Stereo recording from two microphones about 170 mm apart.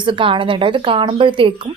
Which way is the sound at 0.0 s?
30° right (ahead or behind).